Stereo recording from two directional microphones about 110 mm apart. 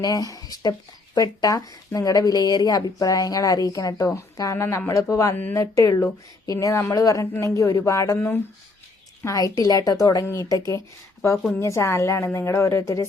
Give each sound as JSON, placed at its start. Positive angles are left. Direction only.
{"t": 0.0, "sound": "speech", "side_deg": 30}
{"t": 10.2, "sound": "speech", "side_deg": 25}